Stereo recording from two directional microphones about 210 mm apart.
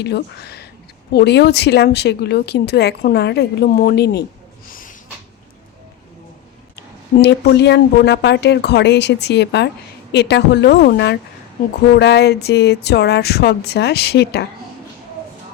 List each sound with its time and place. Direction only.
0.0 s speech: 50° left (ahead or behind)
4.7 s snort: 40° left (ahead or behind)
7.2 s speech: 55° left (ahead or behind)